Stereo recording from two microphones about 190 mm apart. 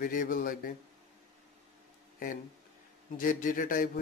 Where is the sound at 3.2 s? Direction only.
45° left (ahead or behind).